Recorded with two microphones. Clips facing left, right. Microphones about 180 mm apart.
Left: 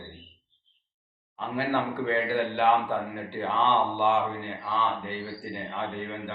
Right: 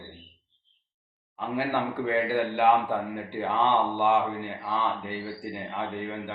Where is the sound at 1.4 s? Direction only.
10° right (ahead or behind).